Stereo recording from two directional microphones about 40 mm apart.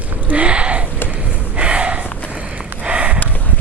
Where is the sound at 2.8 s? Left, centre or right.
Right.